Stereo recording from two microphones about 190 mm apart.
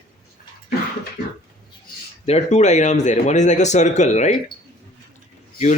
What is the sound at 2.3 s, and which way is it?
Speech, 35° left (ahead or behind).